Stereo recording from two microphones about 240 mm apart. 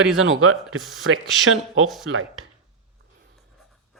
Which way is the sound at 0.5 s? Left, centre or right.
Centre.